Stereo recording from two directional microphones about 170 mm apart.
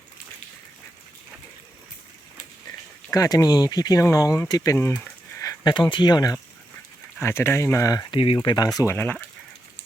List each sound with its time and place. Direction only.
3.1 s speech: 20° left (ahead or behind)